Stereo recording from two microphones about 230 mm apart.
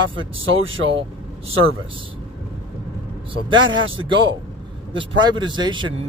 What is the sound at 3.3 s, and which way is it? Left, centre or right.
Speech, right.